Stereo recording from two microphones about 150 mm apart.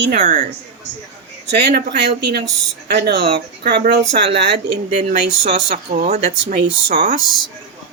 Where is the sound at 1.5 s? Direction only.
90° right.